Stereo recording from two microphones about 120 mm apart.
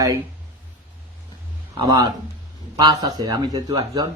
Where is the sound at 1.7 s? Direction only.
35° right (ahead or behind).